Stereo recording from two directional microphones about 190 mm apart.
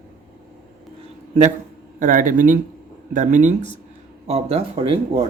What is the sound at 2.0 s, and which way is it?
Speech, 45° right (ahead or behind).